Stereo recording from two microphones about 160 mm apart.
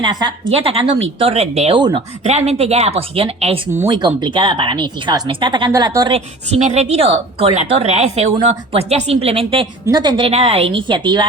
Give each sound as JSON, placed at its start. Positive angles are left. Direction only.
{"t": 0.0, "sound": "a woman's voice", "side_deg": -25}
{"t": 0.5, "sound": "speech", "side_deg": -35}
{"t": 1.8, "sound": "a woman's voice", "side_deg": -25}
{"t": 2.2, "sound": "speech", "side_deg": -45}
{"t": 3.8, "sound": "a woman's voice", "side_deg": -25}
{"t": 6.1, "sound": "a woman's voice", "side_deg": -40}